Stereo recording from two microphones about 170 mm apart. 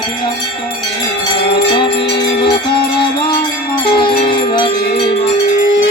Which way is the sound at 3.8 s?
30° left (ahead or behind).